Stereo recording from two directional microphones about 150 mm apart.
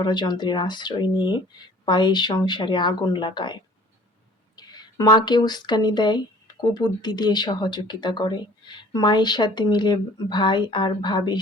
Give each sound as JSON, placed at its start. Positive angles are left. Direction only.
{"t": 0.0, "sound": "speech", "side_deg": 30}